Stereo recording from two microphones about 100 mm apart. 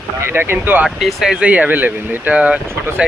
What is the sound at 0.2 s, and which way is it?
Speech, 25° right (ahead or behind).